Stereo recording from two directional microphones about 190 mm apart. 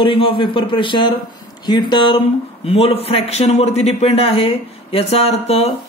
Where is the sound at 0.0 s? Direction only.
25° left (ahead or behind).